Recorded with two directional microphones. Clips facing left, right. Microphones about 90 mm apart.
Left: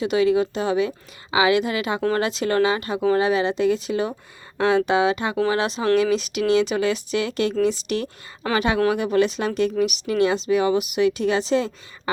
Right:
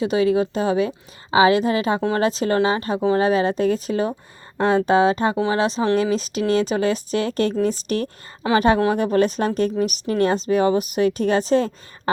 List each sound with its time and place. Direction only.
0.0 s a woman's voice: 35° right (ahead or behind)